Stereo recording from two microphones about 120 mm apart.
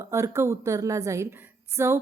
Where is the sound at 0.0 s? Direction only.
25° right (ahead or behind).